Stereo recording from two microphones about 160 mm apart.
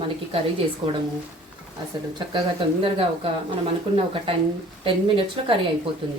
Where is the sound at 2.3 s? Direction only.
35° right (ahead or behind).